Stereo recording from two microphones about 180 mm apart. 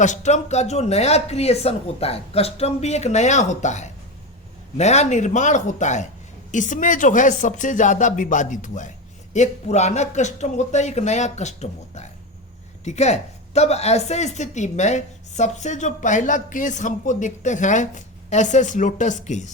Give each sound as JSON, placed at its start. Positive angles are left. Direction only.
{"t": 0.0, "sound": "speech", "side_deg": 40}